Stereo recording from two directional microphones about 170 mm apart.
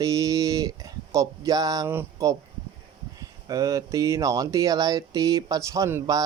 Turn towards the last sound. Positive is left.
turn(degrees=-20)  # may be behind; listen again after turning